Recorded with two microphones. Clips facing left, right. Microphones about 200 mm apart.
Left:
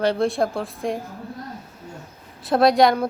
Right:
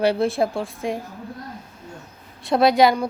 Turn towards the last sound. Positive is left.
turn(degrees=0)  # may be behind; listen again after turning